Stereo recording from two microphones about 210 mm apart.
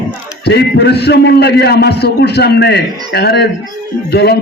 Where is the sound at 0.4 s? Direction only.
50° left (ahead or behind).